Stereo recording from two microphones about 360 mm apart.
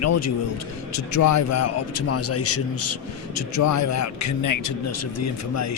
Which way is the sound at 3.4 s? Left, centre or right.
Left.